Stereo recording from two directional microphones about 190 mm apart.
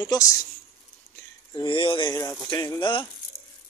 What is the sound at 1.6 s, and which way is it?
Speech, 25° left (ahead or behind).